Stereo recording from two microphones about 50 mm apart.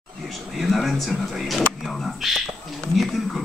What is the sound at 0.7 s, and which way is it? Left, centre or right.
Speech, centre.